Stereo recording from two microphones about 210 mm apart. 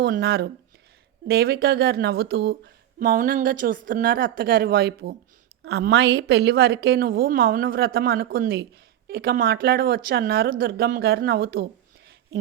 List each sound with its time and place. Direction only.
0.0 s speech: 50° right (ahead or behind)